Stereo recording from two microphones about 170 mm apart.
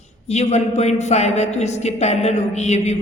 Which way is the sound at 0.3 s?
40° left (ahead or behind).